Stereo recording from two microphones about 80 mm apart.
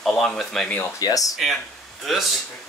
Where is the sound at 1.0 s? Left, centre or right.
Left.